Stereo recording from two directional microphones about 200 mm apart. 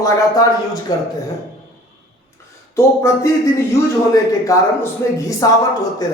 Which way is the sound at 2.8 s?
15° left (ahead or behind).